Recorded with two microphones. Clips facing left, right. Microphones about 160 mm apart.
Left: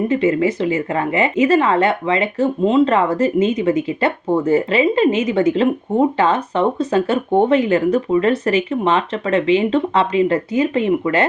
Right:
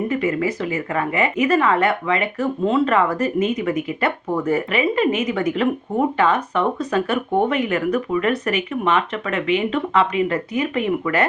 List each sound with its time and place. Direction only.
0.1 s a woman's voice: 25° left (ahead or behind)